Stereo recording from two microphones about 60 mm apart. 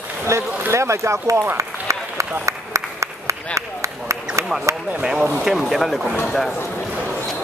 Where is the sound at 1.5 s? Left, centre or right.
Right.